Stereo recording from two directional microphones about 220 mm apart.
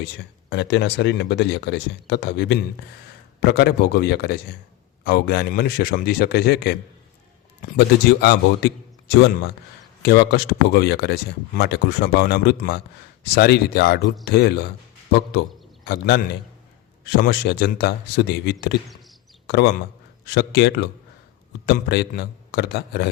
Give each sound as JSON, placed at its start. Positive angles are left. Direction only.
{"t": 0.0, "sound": "a man's voice", "side_deg": 50}